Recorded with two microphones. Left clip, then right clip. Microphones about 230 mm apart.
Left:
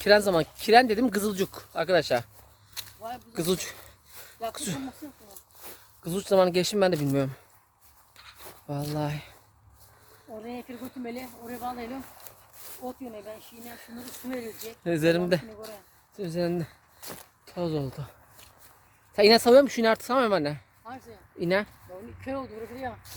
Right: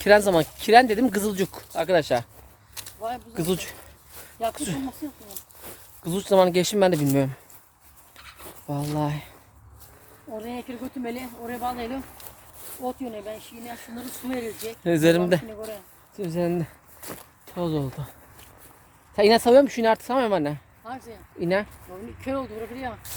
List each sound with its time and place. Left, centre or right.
0.0 s speech: centre
2.8 s a sound: centre
3.3 s a sound: left
4.5 s speech: centre
8.1 s dog: centre
8.4 s a sound: centre
9.0 s speech: centre
10.3 s speech: right
13.7 s speech: centre
19.1 s speech: left
20.8 s speech: centre
21.3 s speech: left
22.2 s speech: right